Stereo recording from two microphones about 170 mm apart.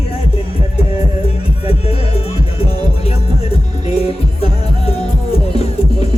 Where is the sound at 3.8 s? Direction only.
35° left (ahead or behind).